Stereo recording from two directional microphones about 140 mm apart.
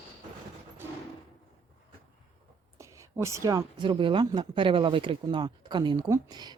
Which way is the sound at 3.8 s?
35° right (ahead or behind).